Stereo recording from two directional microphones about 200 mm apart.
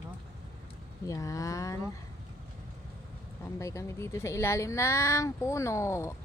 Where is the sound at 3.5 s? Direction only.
15° left (ahead or behind).